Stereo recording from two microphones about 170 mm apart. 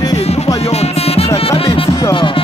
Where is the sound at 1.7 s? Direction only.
30° left (ahead or behind).